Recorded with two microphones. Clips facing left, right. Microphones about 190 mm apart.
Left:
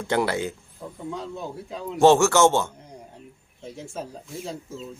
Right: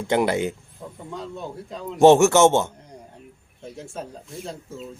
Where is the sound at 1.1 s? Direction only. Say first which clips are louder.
Right 2 dB; centre (ahead or behind).